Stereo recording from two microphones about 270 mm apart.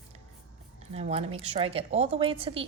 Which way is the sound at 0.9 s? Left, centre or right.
Right.